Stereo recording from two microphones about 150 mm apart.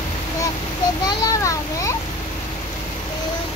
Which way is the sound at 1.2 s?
20° left (ahead or behind).